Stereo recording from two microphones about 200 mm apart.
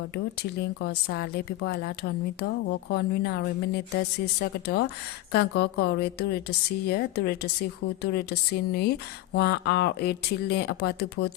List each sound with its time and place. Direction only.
0.6 s a woman's voice: 55° left (ahead or behind)
2.9 s a woman's voice: 55° left (ahead or behind)